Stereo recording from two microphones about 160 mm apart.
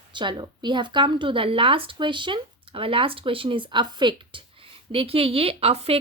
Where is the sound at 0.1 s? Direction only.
30° right (ahead or behind).